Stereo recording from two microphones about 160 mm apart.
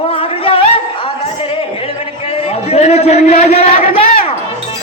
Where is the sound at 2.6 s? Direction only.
40° left (ahead or behind).